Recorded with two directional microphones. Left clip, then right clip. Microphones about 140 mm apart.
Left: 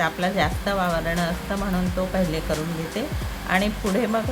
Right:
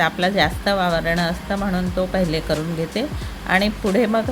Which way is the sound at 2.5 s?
35° right (ahead or behind).